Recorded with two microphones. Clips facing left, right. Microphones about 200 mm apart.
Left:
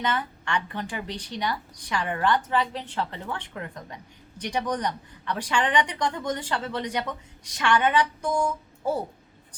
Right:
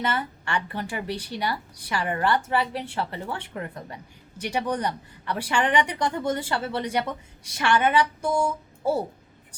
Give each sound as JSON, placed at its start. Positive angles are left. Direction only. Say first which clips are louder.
{"t": 0.0, "sound": "speech", "louder": "right 1 dB", "side_deg": -5}